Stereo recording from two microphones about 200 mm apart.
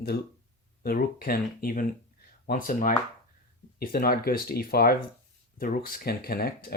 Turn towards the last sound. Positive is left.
turn(degrees=50)  # may be behind; listen again after turning